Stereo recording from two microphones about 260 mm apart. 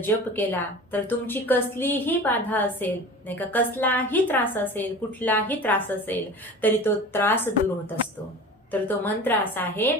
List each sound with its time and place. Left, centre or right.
0.0 s a woman's voice: centre
8.7 s a woman's voice: centre